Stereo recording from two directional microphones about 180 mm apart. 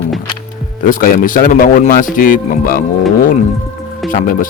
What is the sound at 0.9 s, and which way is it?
Speech, 50° left (ahead or behind).